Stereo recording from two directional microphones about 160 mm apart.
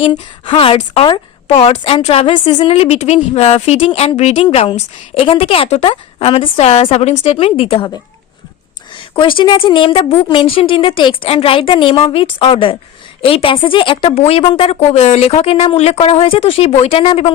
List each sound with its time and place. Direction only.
0.0 s a woman's voice: 30° left (ahead or behind)
2.7 s a woman's voice: 40° left (ahead or behind)
9.0 s a sound: 30° left (ahead or behind)
9.4 s a woman's voice: 30° left (ahead or behind)